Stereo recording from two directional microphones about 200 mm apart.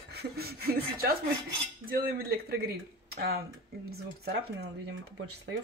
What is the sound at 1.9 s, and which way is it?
Speech, 50° right (ahead or behind).